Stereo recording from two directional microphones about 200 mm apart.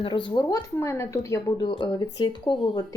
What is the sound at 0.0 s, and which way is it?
Speech, 25° left (ahead or behind).